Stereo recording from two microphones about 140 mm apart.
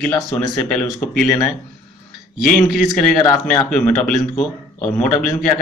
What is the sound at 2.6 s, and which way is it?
Speech, centre (ahead or behind).